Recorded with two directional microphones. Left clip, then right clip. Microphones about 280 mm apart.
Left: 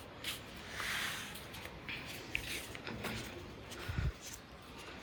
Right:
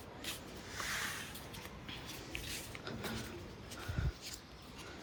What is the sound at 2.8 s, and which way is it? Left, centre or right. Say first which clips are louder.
Vehicle: left 1 dB; centre.